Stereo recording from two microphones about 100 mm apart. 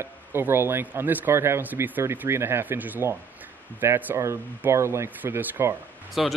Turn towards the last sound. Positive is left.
turn(degrees=0)  # may be behind; listen again after turning